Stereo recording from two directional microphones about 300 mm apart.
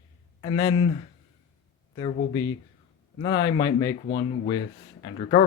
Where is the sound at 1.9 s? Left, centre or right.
Centre.